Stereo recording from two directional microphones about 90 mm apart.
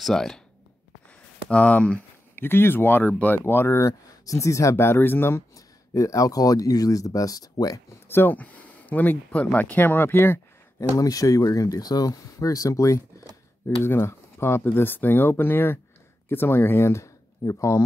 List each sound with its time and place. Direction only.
0.0 s speech: 5° left (ahead or behind)
1.5 s speech: 15° left (ahead or behind)
5.9 s speech: 40° left (ahead or behind)
8.1 s speech: 20° left (ahead or behind)
11.0 s speech: 40° left (ahead or behind)